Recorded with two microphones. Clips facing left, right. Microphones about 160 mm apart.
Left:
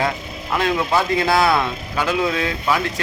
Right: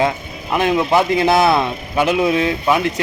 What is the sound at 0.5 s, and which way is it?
A man's voice, 20° right (ahead or behind).